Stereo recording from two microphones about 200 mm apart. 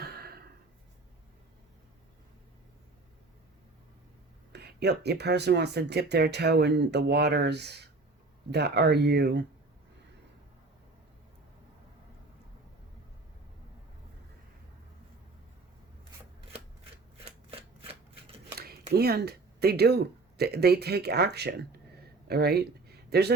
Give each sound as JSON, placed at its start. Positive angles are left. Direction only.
{"t": 0.0, "sound": "a sound", "side_deg": -50}
{"t": 4.5, "sound": "speech", "side_deg": -55}
{"t": 18.6, "sound": "speech", "side_deg": -50}